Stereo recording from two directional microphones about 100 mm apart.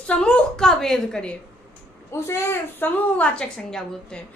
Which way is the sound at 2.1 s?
25° left (ahead or behind).